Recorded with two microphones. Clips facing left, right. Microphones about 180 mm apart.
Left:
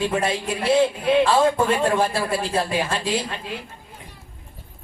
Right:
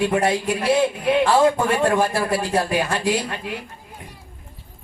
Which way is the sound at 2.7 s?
15° right (ahead or behind).